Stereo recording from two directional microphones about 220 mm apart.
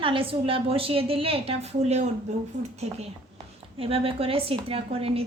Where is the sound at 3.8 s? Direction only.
25° right (ahead or behind).